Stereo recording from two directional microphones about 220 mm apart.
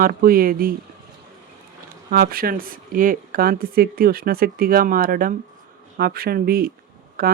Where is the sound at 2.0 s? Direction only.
40° right (ahead or behind).